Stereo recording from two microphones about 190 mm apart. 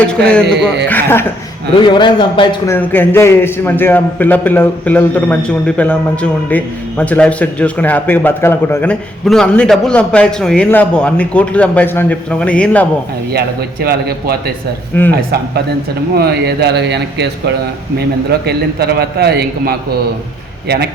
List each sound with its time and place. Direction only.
0.0 s a man's voice: 5° left (ahead or behind)
1.9 s a man's voice: 25° left (ahead or behind)
2.6 s a man's voice: 10° left (ahead or behind)
13.3 s a man's voice: 55° right (ahead or behind)